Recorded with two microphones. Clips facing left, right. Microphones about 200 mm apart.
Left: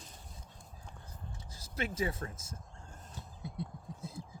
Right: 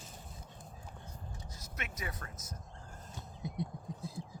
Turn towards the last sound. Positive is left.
turn(degrees=25)  # may be behind; listen again after turning